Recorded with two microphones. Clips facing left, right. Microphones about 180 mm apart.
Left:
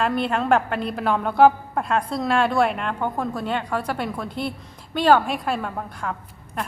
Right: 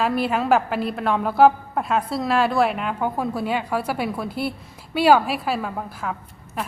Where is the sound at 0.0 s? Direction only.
5° right (ahead or behind).